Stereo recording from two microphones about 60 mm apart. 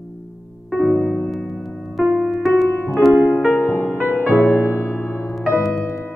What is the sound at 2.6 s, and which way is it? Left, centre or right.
Music, left.